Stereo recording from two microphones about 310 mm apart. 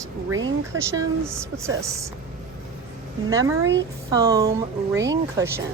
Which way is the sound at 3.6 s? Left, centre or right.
Right.